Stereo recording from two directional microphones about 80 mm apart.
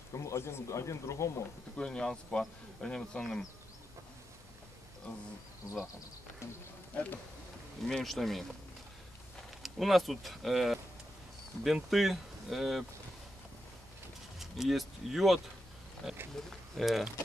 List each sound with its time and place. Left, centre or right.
0.1 s speech: left
1.8 s speech: centre
6.4 s speech: left
7.8 s speech: centre
9.6 s speech: centre
14.4 s speech: centre